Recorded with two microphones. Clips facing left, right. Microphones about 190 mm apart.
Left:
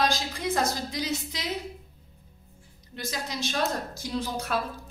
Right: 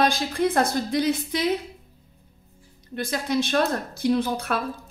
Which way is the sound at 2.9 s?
55° right (ahead or behind).